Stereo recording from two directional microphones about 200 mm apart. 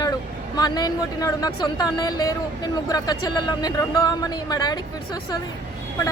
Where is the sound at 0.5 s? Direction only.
20° left (ahead or behind).